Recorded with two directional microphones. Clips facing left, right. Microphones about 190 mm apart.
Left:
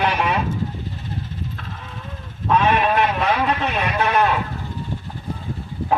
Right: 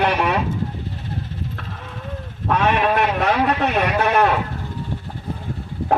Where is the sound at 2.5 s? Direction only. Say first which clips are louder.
Left 1 dB; 65° right (ahead or behind).